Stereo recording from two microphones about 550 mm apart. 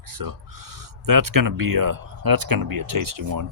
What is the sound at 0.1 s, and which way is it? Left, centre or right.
Speech, right.